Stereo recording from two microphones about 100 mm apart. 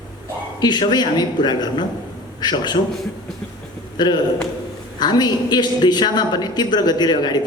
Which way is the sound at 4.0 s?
45° left (ahead or behind).